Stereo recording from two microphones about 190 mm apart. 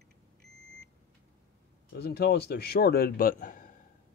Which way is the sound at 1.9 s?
55° left (ahead or behind).